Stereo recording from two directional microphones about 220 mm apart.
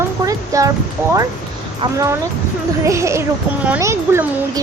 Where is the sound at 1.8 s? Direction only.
15° right (ahead or behind).